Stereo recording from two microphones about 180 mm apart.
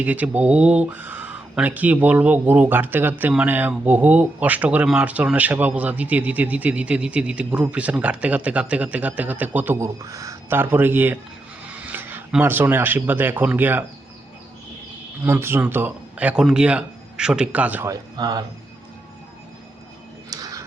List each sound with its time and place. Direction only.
0.0 s speech: 10° right (ahead or behind)
15.2 s speech: 15° right (ahead or behind)
20.3 s a sound: 20° right (ahead or behind)